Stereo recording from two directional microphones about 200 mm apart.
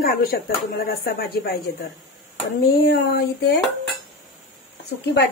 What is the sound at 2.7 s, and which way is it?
Speech, 50° left (ahead or behind).